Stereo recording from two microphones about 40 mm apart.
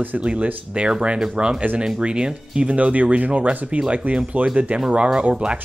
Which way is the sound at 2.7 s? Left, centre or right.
Right.